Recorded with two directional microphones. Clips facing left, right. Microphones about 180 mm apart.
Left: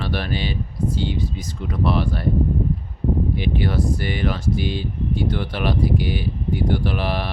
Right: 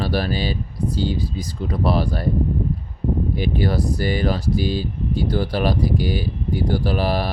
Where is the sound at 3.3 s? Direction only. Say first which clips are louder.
Right 1 dB; 40° right (ahead or behind).